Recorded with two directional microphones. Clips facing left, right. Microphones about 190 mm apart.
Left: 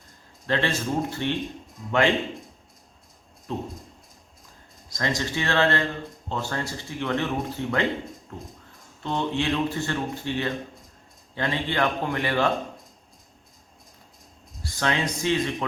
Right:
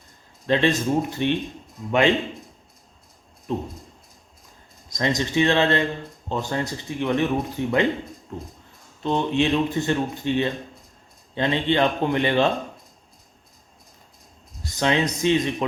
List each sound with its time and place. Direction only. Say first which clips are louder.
0.4 s speech: right 5 dB; 20° right (ahead or behind)
3.5 s speech: right 4 dB; 15° right (ahead or behind)
4.9 s speech: right 4 dB; 20° right (ahead or behind)
9.0 s speech: right 4 dB; 20° right (ahead or behind)
14.6 s speech: right 4 dB; 20° right (ahead or behind)